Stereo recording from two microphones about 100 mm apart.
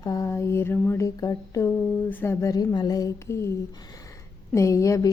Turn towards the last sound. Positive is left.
turn(degrees=30)  # may be behind; listen again after turning